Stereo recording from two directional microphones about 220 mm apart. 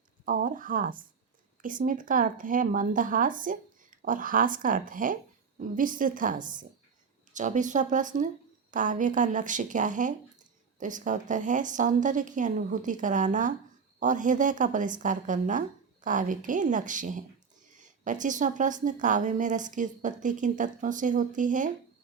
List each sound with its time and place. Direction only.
0.3 s a woman's voice: 40° right (ahead or behind)